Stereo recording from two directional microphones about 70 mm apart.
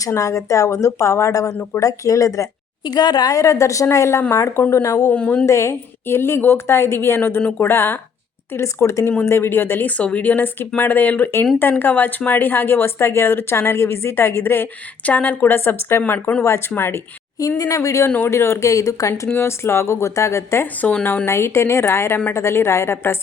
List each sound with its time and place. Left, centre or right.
0.1 s a woman's voice: left
2.8 s a woman's voice: left
4.7 s a woman's voice: left
4.9 s speech: centre
5.5 s a woman's voice: left
9.9 s a woman's voice: centre
17.6 s a woman's voice: left
19.3 s speech: left